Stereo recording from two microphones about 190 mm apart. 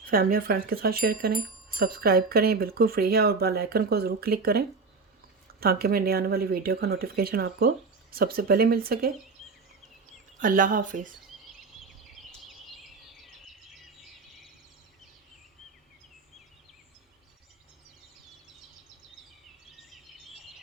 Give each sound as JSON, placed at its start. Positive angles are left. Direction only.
{"t": 0.0, "sound": "speech", "side_deg": -50}
{"t": 10.4, "sound": "speech", "side_deg": -45}
{"t": 19.9, "sound": "a sound", "side_deg": 0}